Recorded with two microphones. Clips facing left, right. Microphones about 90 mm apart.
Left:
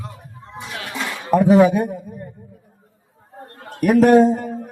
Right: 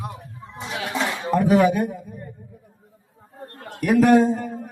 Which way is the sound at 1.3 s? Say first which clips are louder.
Left 5 dB; 20° left (ahead or behind).